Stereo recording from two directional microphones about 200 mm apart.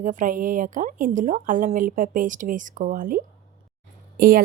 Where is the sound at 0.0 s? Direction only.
40° right (ahead or behind).